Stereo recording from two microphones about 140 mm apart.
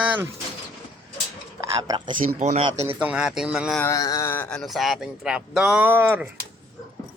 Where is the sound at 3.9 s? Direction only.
25° left (ahead or behind).